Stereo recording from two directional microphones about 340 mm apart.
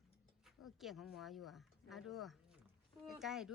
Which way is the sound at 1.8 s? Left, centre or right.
Centre.